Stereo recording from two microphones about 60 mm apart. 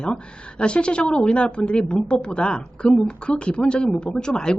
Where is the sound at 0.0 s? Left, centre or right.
Centre.